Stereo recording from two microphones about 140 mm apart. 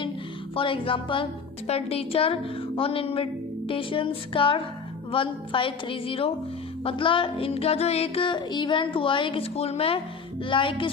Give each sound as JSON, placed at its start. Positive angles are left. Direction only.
{"t": 0.5, "sound": "music", "side_deg": 40}